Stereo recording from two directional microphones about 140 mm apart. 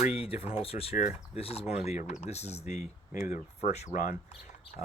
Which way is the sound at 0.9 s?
65° left (ahead or behind).